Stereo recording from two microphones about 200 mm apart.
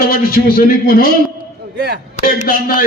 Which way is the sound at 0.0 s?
50° left (ahead or behind).